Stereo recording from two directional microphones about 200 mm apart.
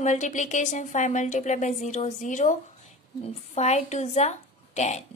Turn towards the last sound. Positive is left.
turn(degrees=35)  # may be behind; listen again after turning